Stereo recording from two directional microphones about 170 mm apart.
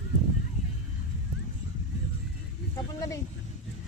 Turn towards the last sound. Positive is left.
turn(degrees=20)  # may be behind; listen again after turning